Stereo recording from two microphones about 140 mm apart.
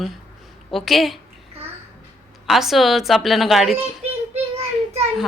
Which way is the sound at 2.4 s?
Centre (ahead or behind).